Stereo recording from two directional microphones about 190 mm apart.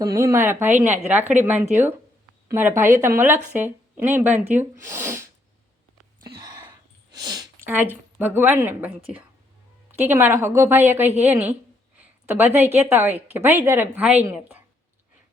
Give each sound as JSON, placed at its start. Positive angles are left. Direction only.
{"t": 0.0, "sound": "speech", "side_deg": -15}
{"t": 6.2, "sound": "a sound", "side_deg": -20}
{"t": 7.1, "sound": "speech", "side_deg": -20}
{"t": 9.9, "sound": "speech", "side_deg": -10}